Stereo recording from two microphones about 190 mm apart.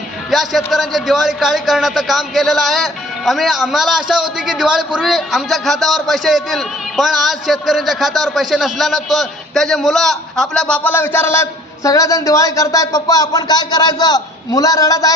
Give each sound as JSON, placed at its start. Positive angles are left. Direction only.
{"t": 0.3, "sound": "a man's voice", "side_deg": 0}